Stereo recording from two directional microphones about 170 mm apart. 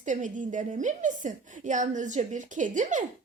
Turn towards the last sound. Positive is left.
turn(degrees=-45)  # may be behind; listen again after turning